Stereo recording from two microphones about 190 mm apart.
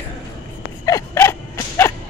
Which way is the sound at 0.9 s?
15° left (ahead or behind).